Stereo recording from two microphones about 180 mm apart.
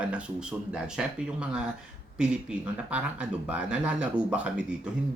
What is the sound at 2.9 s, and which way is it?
Speech, 5° right (ahead or behind).